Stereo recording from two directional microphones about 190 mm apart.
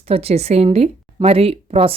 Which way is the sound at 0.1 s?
30° right (ahead or behind).